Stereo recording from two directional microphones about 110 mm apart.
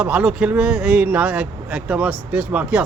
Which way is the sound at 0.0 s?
15° right (ahead or behind).